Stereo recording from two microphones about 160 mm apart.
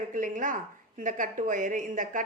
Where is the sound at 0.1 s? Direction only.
55° right (ahead or behind).